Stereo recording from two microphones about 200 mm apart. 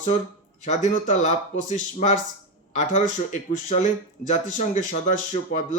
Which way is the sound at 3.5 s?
35° left (ahead or behind).